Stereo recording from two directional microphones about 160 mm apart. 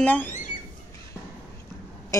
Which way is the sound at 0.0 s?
10° left (ahead or behind).